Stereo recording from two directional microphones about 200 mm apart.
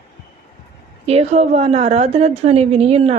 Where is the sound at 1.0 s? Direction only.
30° right (ahead or behind).